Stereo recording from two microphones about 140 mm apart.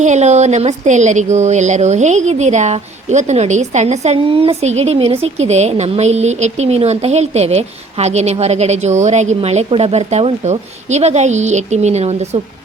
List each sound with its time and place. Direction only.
0.0 s a woman's voice: 55° right (ahead or behind)